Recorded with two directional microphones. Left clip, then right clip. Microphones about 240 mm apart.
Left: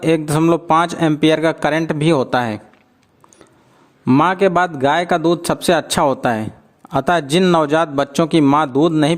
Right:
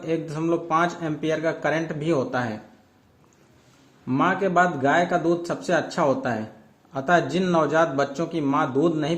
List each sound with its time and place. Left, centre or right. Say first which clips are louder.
0.0 s speech: left 11 dB; left
4.0 s speech: left 9 dB; left